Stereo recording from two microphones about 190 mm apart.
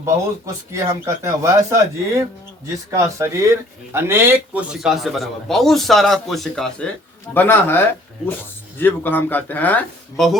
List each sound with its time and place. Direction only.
0.0 s a man's voice: 15° right (ahead or behind); by 10.3 s 5° left (ahead or behind)